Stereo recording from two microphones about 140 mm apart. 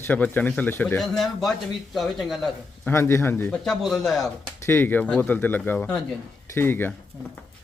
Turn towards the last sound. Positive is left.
turn(degrees=15)  # may be behind; listen again after turning